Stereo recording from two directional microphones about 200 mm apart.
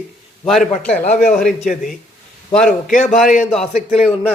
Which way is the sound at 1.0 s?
35° left (ahead or behind).